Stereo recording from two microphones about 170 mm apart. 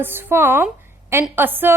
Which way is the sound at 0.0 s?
10° right (ahead or behind).